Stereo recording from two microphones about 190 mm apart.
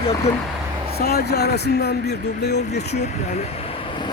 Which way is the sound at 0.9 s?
55° left (ahead or behind).